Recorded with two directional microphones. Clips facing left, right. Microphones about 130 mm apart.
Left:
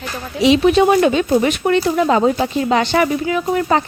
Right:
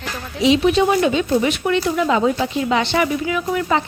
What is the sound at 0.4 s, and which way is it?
Speech, 60° left (ahead or behind).